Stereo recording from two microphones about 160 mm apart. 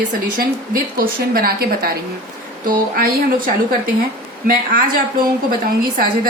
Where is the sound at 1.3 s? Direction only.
70° right (ahead or behind).